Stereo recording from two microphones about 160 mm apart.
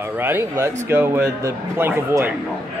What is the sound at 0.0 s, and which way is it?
Speech, 15° right (ahead or behind).